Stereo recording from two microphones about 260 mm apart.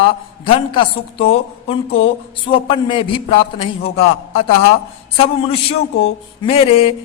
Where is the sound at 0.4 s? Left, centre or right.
Centre.